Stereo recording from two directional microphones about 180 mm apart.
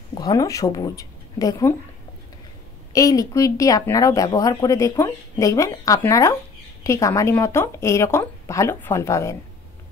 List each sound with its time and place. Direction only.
0.1 s speech: 20° left (ahead or behind)
2.9 s speech: 20° left (ahead or behind)